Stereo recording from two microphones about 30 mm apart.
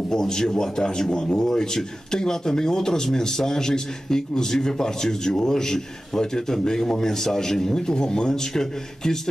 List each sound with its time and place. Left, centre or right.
0.1 s a man's voice: left